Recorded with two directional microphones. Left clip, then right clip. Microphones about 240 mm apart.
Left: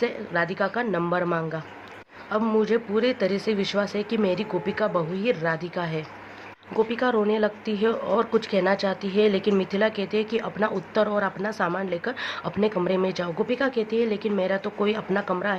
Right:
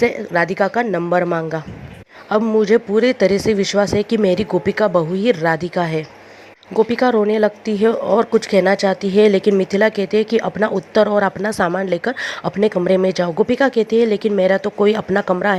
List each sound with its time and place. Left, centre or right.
0.0 s speech: right